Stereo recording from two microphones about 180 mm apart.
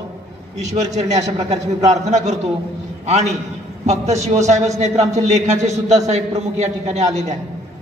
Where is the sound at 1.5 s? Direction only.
40° right (ahead or behind).